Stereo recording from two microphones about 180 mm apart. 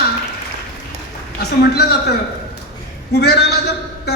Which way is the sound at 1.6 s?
60° left (ahead or behind).